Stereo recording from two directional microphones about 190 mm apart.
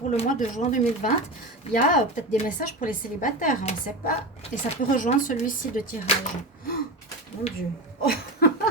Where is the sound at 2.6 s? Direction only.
45° left (ahead or behind).